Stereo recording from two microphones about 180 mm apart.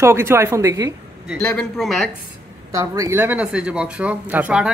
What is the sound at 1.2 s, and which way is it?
Speech, 5° left (ahead or behind).